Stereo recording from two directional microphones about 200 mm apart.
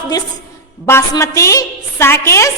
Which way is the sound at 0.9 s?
15° left (ahead or behind).